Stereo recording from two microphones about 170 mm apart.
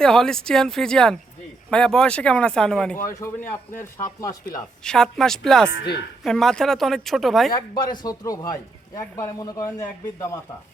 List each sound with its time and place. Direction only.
0.0 s a woman's voice: 5° left (ahead or behind)
3.1 s speech: 15° left (ahead or behind)
4.8 s a woman's voice: 5° left (ahead or behind)
5.7 s speech: 75° left (ahead or behind)
6.2 s a woman's voice: 5° left (ahead or behind)
7.5 s a man's voice: 25° left (ahead or behind)